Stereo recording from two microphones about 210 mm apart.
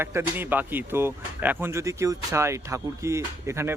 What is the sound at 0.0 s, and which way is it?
Speech, 10° right (ahead or behind).